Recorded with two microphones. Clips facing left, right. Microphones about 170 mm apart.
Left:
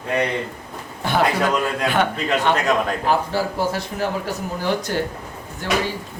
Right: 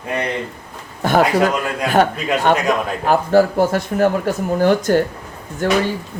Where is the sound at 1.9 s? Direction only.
45° right (ahead or behind).